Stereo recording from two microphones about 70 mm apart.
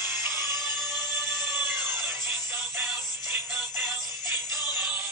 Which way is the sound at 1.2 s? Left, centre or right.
Right.